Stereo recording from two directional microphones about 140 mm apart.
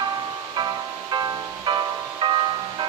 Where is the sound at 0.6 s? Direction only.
30° right (ahead or behind).